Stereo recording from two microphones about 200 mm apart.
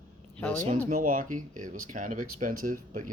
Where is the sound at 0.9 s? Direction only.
40° right (ahead or behind).